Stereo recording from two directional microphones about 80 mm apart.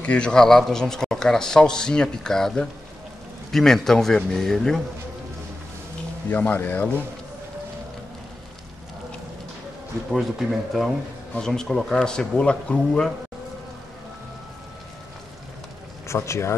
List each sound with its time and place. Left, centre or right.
0.0 s a man's voice: centre
6.2 s speech: left
10.1 s a man's voice: centre
16.3 s speech: left